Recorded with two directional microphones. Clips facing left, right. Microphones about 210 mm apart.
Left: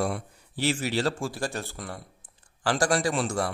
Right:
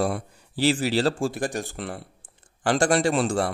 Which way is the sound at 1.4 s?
15° right (ahead or behind).